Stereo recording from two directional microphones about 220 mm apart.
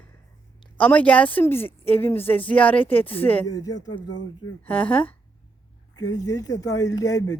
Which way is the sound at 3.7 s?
90° left.